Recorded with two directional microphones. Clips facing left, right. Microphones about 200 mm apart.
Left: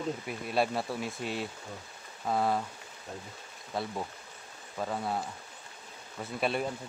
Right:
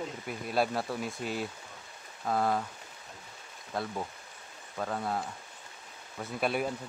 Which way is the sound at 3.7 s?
Centre (ahead or behind).